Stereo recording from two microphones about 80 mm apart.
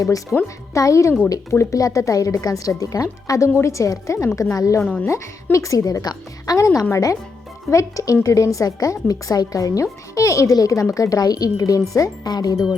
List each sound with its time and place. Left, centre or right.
0.4 s a woman's voice: left